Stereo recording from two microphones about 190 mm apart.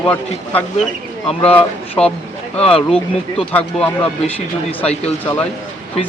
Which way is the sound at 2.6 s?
30° left (ahead or behind).